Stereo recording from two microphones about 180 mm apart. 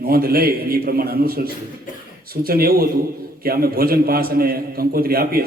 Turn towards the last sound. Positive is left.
turn(degrees=-55)  # may be behind; listen again after turning